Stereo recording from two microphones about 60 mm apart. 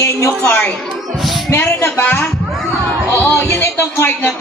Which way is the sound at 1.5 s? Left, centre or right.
Left.